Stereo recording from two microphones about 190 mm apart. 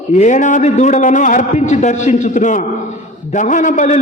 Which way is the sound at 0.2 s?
40° left (ahead or behind).